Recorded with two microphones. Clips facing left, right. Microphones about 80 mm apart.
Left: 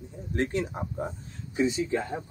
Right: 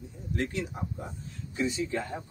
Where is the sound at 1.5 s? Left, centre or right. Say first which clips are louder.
Left 4 dB; left.